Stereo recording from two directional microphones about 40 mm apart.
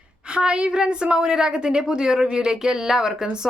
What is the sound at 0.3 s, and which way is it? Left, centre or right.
A woman's voice, right.